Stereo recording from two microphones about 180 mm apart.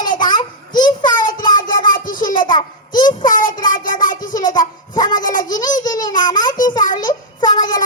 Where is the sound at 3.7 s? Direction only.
45° left (ahead or behind).